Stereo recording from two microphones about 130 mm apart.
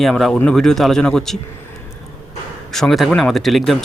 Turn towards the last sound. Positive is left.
turn(degrees=0)  # may be behind; listen again after turning